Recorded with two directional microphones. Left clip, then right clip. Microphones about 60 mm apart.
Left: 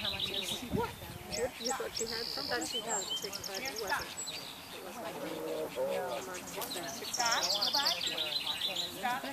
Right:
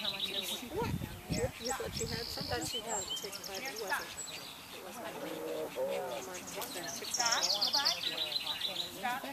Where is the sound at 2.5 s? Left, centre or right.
Right.